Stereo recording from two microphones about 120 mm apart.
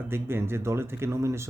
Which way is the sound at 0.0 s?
20° right (ahead or behind).